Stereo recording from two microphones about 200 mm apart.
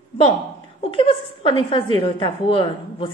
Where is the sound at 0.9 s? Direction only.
25° left (ahead or behind).